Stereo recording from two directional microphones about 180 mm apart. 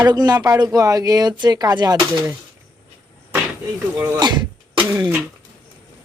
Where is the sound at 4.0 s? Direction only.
20° right (ahead or behind).